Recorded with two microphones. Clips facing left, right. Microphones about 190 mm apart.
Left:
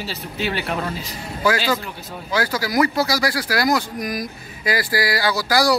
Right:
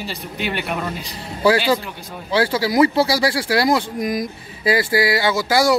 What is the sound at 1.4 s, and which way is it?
Speech, 30° right (ahead or behind).